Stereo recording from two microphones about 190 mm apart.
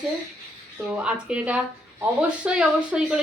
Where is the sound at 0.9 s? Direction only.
5° right (ahead or behind).